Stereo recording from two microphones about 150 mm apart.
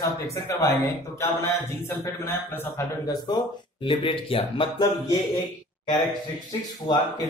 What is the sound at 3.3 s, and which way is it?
Speech, 25° left (ahead or behind).